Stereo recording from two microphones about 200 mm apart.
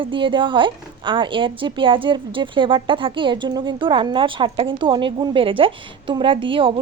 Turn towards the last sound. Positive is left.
turn(degrees=-25)  # may be behind; listen again after turning